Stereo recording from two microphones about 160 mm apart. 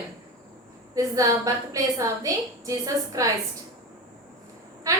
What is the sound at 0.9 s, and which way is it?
A woman's voice, 20° right (ahead or behind).